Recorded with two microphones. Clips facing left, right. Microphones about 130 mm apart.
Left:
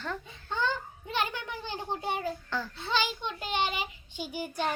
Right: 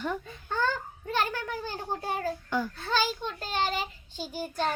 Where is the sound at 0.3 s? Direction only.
20° left (ahead or behind).